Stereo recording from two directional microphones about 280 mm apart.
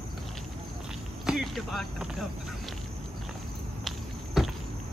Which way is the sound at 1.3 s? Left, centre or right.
Centre.